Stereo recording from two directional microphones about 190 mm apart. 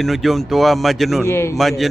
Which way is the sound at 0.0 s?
Centre (ahead or behind).